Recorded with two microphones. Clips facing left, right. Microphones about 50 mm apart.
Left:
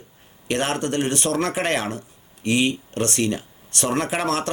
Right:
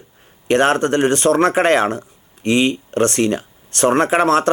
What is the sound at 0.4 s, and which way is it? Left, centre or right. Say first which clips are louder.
Speech: right 9 dB; right.